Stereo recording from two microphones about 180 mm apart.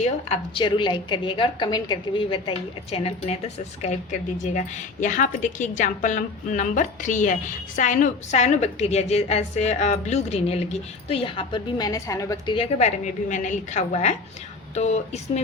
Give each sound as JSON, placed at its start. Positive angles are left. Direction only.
{"t": 0.3, "sound": "a woman's voice", "side_deg": 30}
{"t": 12.5, "sound": "a woman's voice", "side_deg": 35}